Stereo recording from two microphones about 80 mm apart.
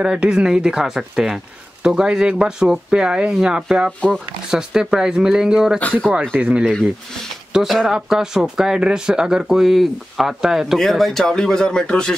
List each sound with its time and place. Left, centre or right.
0.0 s speech: centre
6.6 s speech: centre